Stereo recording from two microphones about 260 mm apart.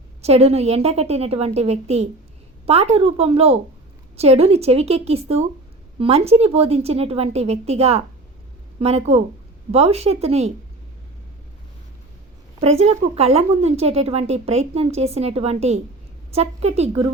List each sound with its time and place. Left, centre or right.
0.2 s a woman's voice: right
12.5 s a woman's voice: right